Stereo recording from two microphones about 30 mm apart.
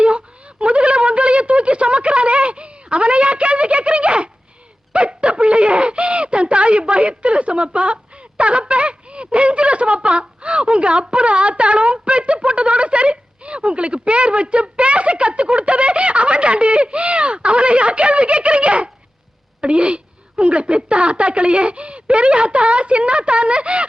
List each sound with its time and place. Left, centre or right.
0.6 s speech: right
4.9 s a sound: right
8.4 s a woman's voice: right